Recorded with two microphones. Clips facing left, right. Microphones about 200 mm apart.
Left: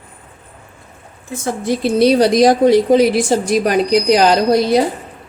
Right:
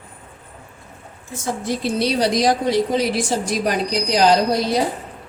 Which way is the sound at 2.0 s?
50° left (ahead or behind).